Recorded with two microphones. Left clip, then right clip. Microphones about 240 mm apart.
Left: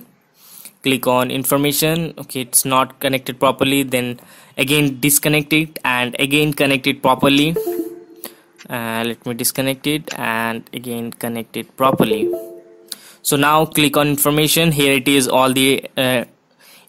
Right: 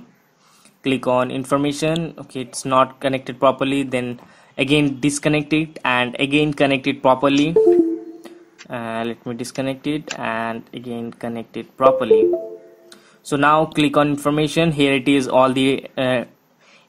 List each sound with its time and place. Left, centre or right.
0.8 s speech: left
12.9 s guitar: left
13.7 s speech: left